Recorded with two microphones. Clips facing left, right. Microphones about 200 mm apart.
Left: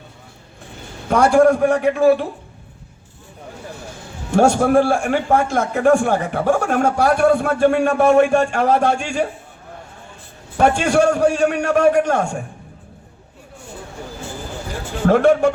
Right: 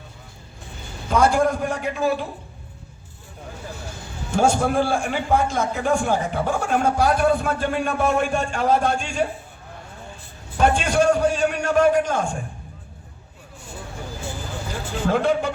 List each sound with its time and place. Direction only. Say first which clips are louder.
1.1 s a man's voice: left 6 dB; 65° left (ahead or behind)
4.3 s a man's voice: left 5 dB; 70° left (ahead or behind)
10.6 s a man's voice: left 4 dB; 70° left (ahead or behind)
15.0 s a man's voice: left 7 dB; 70° left (ahead or behind)